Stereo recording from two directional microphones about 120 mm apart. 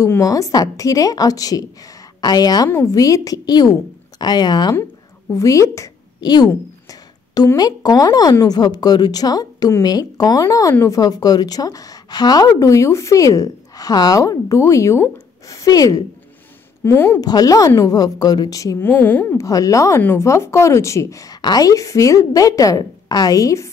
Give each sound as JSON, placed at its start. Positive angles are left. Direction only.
{"t": 0.0, "sound": "a woman's voice", "side_deg": 25}
{"t": 5.3, "sound": "a sound", "side_deg": 25}
{"t": 7.5, "sound": "a woman's voice", "side_deg": 35}
{"t": 17.2, "sound": "speech", "side_deg": 30}
{"t": 18.8, "sound": "speech", "side_deg": 15}
{"t": 19.4, "sound": "a woman's voice", "side_deg": 30}